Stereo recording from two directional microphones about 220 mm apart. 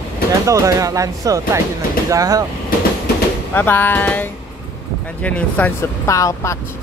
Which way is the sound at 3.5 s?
10° left (ahead or behind).